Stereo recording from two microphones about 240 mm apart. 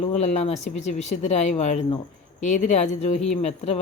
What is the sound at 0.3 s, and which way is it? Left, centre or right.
Speech, left.